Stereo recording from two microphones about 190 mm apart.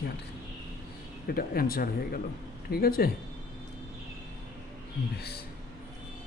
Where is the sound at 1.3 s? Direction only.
50° left (ahead or behind).